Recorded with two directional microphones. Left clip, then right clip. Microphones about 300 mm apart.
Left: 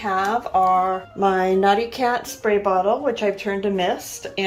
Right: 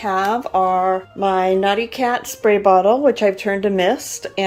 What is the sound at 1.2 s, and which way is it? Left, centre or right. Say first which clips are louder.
A woman's voice: right 1 dB; centre.